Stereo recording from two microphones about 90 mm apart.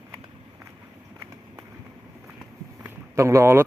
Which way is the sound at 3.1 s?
35° right (ahead or behind).